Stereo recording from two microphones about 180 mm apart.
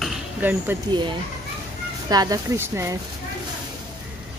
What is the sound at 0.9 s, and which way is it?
A child's voice, 25° right (ahead or behind).